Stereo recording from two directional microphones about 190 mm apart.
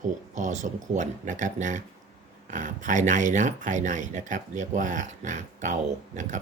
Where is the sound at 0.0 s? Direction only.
40° right (ahead or behind).